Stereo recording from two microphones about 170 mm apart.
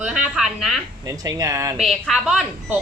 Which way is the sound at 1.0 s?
20° right (ahead or behind).